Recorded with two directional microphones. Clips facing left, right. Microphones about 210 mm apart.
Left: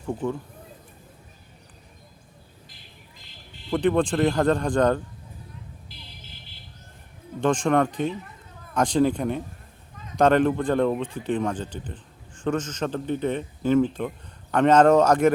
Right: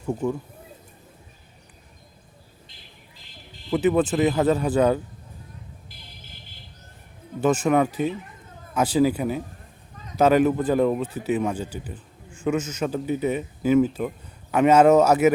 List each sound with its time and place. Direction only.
0.0 s speech: 10° right (ahead or behind)
3.7 s speech: 5° right (ahead or behind)
7.4 s speech: 5° right (ahead or behind)